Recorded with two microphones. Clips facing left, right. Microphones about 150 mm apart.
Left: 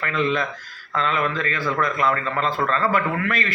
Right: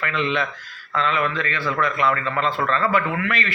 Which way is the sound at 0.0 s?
40° left (ahead or behind).